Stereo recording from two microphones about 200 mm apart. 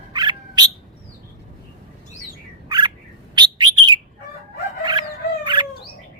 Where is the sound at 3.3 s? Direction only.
20° right (ahead or behind).